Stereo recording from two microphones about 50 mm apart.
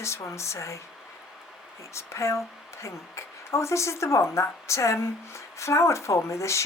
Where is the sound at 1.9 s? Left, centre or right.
Left.